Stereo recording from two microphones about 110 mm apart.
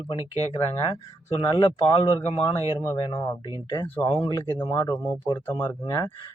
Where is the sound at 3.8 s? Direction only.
15° left (ahead or behind).